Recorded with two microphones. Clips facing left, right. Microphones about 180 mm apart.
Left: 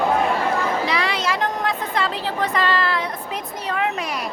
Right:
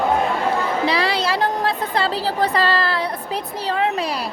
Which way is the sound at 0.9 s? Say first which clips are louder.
Right 3 dB; 35° right (ahead or behind).